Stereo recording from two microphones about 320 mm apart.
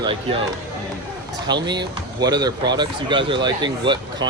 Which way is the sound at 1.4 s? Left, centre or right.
Centre.